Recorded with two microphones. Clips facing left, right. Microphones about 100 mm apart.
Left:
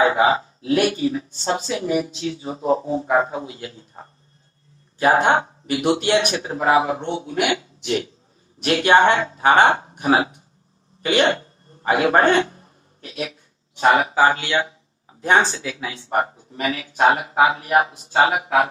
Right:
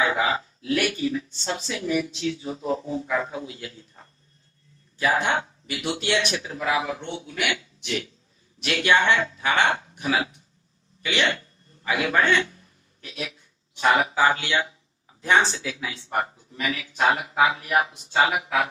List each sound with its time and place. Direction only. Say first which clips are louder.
0.0 s speech: left 7 dB; 40° left (ahead or behind)
11.0 s a sound: left 7 dB; 45° left (ahead or behind)
13.7 s speech: left 4 dB; 35° left (ahead or behind)
15.5 s speech: left 3 dB; 45° left (ahead or behind)